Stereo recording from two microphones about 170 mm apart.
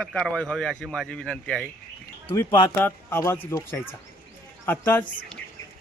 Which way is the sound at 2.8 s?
10° left (ahead or behind).